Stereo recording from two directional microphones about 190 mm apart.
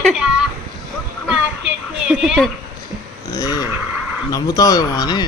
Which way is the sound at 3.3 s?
20° left (ahead or behind).